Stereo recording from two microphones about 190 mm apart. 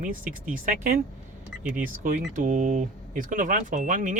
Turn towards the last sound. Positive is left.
turn(degrees=-45)  # may be behind; listen again after turning